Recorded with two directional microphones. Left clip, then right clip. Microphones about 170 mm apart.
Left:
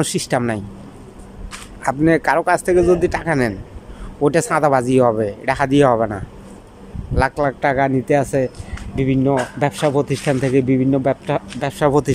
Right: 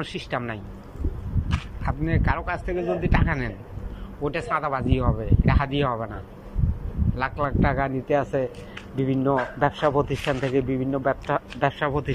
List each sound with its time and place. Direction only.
0.0 s speech: 35° left (ahead or behind)
1.8 s speech: 45° left (ahead or behind)
7.2 s speech: 40° left (ahead or behind)